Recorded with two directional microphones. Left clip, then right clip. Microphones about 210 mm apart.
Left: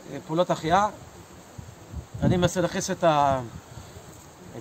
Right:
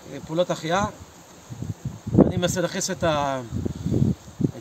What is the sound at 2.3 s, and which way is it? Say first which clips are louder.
A man's voice: even; centre (ahead or behind).